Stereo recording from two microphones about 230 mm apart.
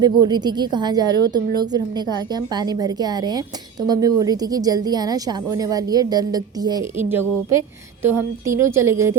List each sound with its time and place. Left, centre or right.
0.0 s a woman's voice: centre